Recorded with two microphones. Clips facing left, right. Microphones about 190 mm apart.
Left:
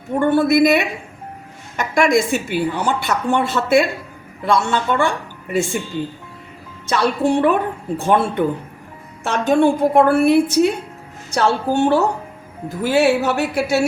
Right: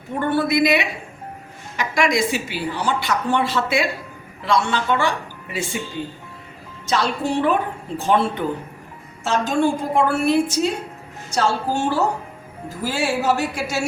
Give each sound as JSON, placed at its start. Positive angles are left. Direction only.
{"t": 0.2, "sound": "a woman's voice", "side_deg": 50}
{"t": 6.8, "sound": "a woman's voice", "side_deg": 60}